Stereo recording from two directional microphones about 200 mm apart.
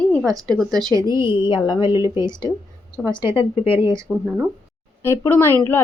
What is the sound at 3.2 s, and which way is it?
Speech, 10° right (ahead or behind).